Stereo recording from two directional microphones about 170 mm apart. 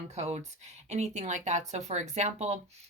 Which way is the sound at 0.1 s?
40° right (ahead or behind).